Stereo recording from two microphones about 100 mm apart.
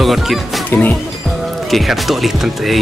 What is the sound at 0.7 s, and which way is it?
Speech, 15° left (ahead or behind).